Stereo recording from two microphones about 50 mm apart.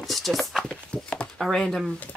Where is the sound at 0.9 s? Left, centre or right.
Left.